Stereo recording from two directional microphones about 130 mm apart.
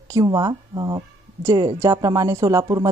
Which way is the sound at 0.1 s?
30° right (ahead or behind).